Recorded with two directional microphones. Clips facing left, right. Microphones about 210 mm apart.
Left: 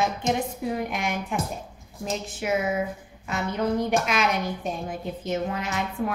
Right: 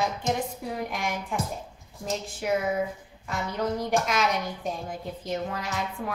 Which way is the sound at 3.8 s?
20° left (ahead or behind).